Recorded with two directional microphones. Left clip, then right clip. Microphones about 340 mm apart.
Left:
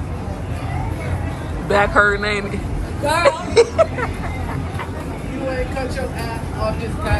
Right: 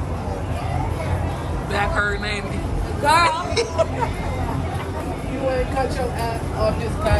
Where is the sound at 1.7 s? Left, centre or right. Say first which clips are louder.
Left 7 dB; centre.